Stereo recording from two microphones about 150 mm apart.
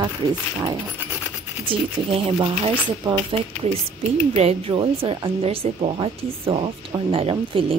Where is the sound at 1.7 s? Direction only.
35° right (ahead or behind).